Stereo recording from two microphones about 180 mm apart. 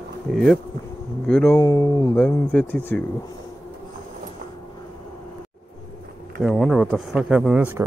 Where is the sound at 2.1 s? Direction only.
5° left (ahead or behind).